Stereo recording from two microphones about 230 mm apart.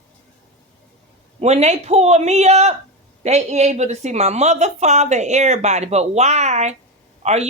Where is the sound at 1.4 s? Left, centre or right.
Right.